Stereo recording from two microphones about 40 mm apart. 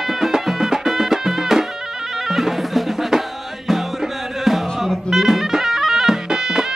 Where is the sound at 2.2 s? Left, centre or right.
Centre.